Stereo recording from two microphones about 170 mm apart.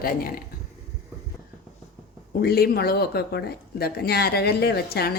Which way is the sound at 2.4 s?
65° left (ahead or behind).